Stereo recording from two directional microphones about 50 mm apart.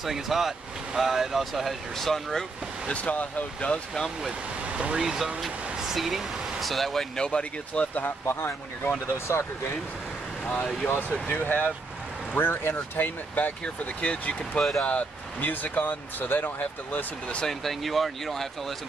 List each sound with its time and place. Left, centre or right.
0.0 s speech: centre
2.9 s speech: left
4.9 s speech: centre
7.2 s speech: centre
8.3 s speech: left
10.5 s speech: centre
11.2 s speech: left
12.4 s speech: left
14.0 s speech: left
14.6 s speech: centre
14.9 s speech: left
17.5 s speech: centre